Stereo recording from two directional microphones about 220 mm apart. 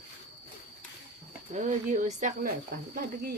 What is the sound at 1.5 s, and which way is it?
Speech, 35° right (ahead or behind).